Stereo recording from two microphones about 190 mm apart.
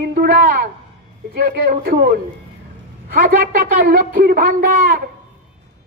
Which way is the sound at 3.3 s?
55° right (ahead or behind).